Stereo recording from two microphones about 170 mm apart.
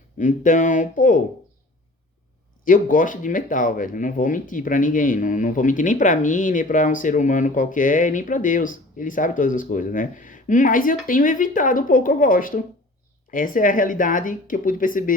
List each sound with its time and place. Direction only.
0.2 s speech: 50° left (ahead or behind)
2.6 s speech: 50° left (ahead or behind)